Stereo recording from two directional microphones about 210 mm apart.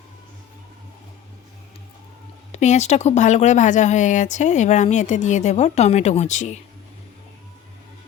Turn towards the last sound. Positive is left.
turn(degrees=35)  # may be behind; listen again after turning